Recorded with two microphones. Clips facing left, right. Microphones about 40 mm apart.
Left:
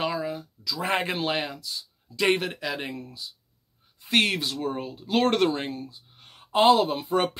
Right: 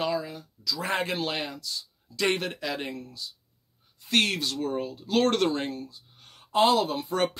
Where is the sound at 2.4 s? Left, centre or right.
Centre.